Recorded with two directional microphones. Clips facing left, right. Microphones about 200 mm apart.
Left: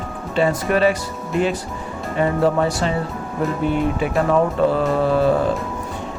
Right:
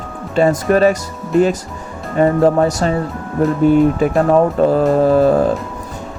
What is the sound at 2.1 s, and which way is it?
Speech, 40° right (ahead or behind).